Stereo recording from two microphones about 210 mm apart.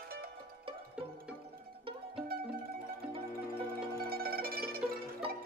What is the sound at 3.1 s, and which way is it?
Music, 25° right (ahead or behind).